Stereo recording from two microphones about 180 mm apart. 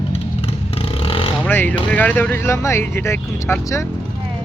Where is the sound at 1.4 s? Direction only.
10° left (ahead or behind).